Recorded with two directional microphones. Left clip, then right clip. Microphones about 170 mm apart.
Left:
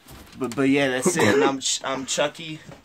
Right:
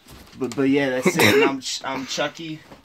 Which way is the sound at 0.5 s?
20° left (ahead or behind).